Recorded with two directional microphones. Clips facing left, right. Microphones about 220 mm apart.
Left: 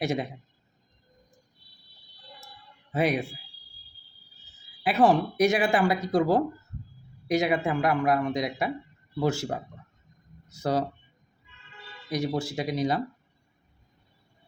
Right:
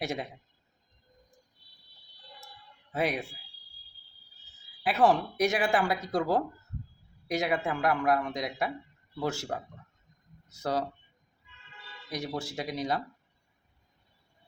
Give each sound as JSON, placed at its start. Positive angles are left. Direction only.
{"t": 0.0, "sound": "speech", "side_deg": 0}
{"t": 2.9, "sound": "speech", "side_deg": 0}
{"t": 5.0, "sound": "speech", "side_deg": 0}
{"t": 12.0, "sound": "speech", "side_deg": 0}